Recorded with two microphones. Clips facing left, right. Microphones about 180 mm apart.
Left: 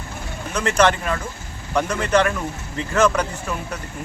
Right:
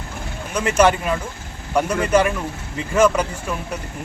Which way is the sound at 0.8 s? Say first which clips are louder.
Right 2 dB; 10° right (ahead or behind).